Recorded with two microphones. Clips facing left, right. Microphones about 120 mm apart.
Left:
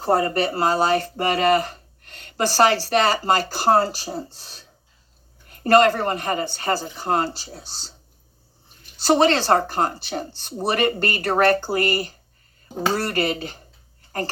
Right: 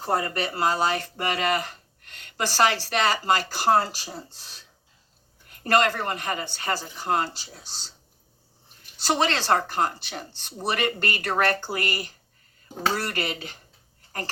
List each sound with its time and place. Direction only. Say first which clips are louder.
0.0 s speech: left 6 dB; 35° left (ahead or behind)
9.0 s speech: left 7 dB; 35° left (ahead or behind)